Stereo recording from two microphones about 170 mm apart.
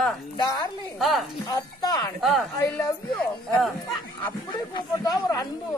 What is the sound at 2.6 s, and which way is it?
Speech, 10° left (ahead or behind).